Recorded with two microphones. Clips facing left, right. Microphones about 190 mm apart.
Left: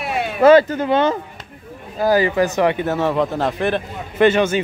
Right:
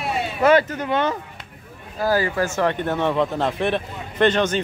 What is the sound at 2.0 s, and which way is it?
Speech, 15° left (ahead or behind).